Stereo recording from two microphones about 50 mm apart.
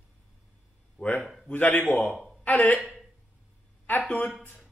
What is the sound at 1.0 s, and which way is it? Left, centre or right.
A man's voice, left.